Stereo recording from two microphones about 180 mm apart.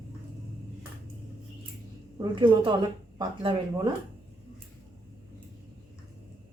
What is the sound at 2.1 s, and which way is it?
A woman's voice, 25° right (ahead or behind).